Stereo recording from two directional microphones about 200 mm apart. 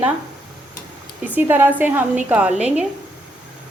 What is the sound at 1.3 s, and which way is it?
A woman's voice, 10° right (ahead or behind).